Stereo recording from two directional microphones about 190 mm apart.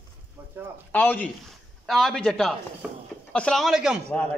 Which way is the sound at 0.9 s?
10° left (ahead or behind).